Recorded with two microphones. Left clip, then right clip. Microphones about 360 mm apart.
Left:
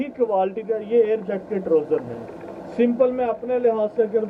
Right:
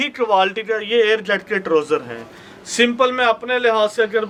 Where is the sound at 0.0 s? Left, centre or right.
Right.